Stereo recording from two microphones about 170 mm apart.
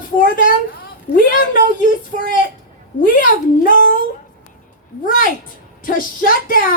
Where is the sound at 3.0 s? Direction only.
55° left (ahead or behind).